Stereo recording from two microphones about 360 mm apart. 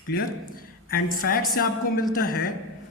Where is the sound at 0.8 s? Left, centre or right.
Left.